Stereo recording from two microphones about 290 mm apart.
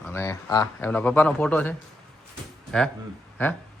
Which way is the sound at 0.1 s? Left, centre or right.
Centre.